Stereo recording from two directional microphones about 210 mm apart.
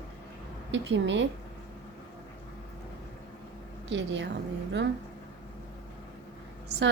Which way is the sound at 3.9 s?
60° right (ahead or behind).